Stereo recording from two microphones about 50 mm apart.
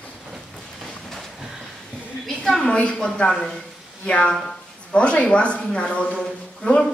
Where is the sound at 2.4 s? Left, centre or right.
Centre.